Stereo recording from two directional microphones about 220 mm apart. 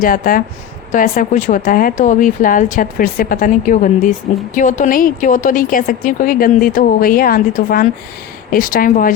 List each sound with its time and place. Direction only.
0.0 s a woman's voice: 40° left (ahead or behind)